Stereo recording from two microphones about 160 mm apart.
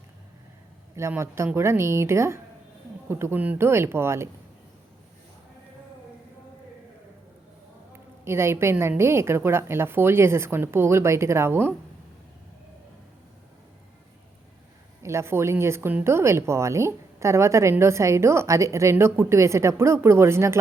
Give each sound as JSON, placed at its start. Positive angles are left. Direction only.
{"t": 0.9, "sound": "a woman's voice", "side_deg": -15}
{"t": 8.2, "sound": "a woman's voice", "side_deg": -15}
{"t": 15.0, "sound": "a woman's voice", "side_deg": -15}